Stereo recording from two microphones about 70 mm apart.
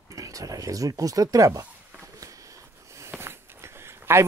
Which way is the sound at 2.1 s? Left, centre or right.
Right.